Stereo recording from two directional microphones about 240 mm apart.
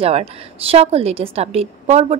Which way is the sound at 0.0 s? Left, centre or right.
Right.